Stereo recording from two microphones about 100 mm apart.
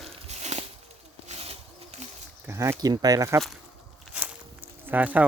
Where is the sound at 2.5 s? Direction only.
25° right (ahead or behind).